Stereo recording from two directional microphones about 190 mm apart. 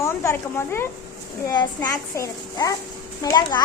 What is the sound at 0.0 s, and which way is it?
A child's voice, 15° left (ahead or behind).